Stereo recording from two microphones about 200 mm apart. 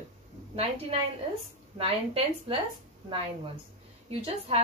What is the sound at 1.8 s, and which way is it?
Speech, 30° right (ahead or behind).